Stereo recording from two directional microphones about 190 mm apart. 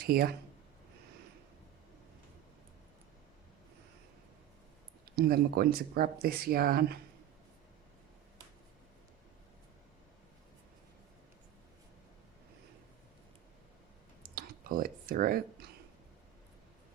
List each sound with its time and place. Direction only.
0.0 s speech: 55° right (ahead or behind)
5.0 s speech: 50° right (ahead or behind)
14.3 s clicking: 50° right (ahead or behind)